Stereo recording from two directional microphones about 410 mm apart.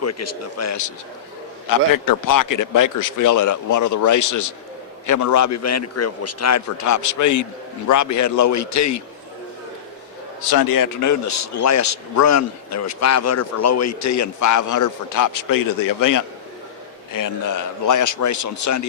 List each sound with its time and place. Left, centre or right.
0.0 s a man's voice: left
10.4 s a man's voice: left